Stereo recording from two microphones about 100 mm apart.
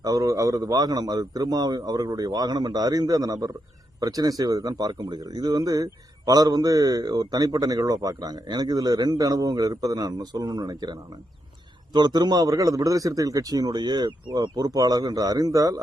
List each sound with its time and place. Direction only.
0.0 s speech: 35° right (ahead or behind)